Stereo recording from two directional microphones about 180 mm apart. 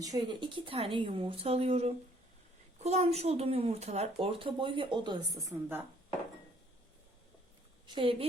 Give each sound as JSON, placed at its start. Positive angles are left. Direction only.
{"t": 0.0, "sound": "speech", "side_deg": -25}
{"t": 7.9, "sound": "a woman's voice", "side_deg": -30}